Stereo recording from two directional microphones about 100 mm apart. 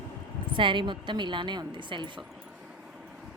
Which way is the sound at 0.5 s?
55° right (ahead or behind).